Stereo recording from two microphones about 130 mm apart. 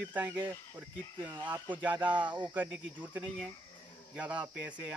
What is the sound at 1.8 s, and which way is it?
Speech, 10° right (ahead or behind).